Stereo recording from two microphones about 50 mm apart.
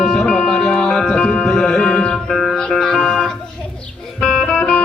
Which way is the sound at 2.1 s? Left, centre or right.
Centre.